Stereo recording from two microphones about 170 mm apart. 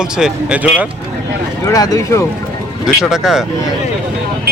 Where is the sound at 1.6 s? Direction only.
20° left (ahead or behind).